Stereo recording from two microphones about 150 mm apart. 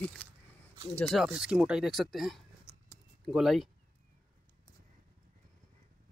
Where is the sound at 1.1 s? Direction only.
5° right (ahead or behind).